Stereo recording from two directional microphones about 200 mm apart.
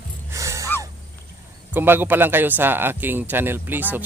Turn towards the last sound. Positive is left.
turn(degrees=-10)  # may be behind; listen again after turning